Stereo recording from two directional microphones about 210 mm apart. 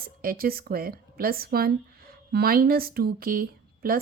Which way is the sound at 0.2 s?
45° right (ahead or behind).